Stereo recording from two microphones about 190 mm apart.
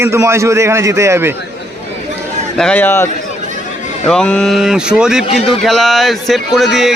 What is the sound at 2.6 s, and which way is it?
A man's voice, 5° left (ahead or behind).